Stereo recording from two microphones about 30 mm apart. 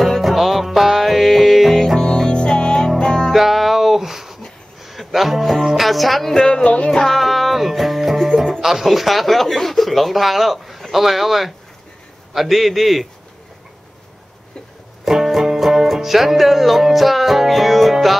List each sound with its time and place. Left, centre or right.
0.2 s music: centre
2.3 s music: left
3.3 s music: centre
6.3 s music: left
6.6 s music: left
6.9 s music: centre
7.2 s music: centre
8.5 s speech: centre
15.0 s music: centre